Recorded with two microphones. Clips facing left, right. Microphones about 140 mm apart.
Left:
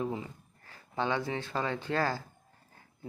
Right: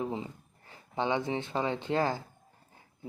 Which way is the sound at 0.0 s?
20° right (ahead or behind).